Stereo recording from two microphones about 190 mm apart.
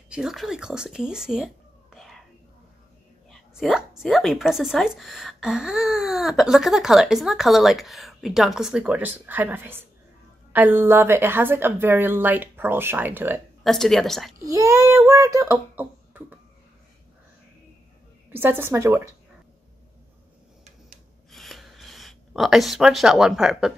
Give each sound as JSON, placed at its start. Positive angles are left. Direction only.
{"t": 0.1, "sound": "speech", "side_deg": -5}
{"t": 3.3, "sound": "a woman's voice", "side_deg": 0}
{"t": 13.7, "sound": "speech", "side_deg": 0}
{"t": 14.4, "sound": "speech", "side_deg": -15}
{"t": 18.3, "sound": "a woman's voice", "side_deg": -10}
{"t": 21.3, "sound": "a sound", "side_deg": 0}